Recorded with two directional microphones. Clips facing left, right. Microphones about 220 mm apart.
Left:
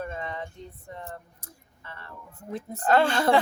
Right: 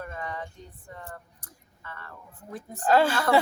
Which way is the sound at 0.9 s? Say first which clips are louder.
Left 2 dB; 25° left (ahead or behind).